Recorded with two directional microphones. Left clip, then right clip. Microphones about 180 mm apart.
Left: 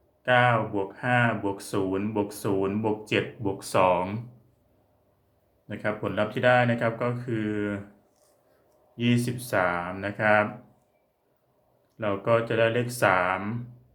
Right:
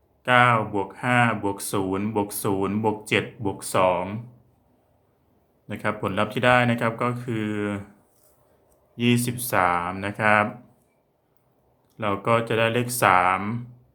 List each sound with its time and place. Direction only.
0.2 s speech: 30° right (ahead or behind); by 4.2 s 5° right (ahead or behind)
5.6 s speech: 30° right (ahead or behind)
9.0 s speech: 25° right (ahead or behind)
11.9 s speech: 30° right (ahead or behind)